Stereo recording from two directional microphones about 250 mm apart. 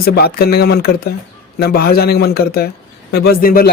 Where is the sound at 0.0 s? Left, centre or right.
Left.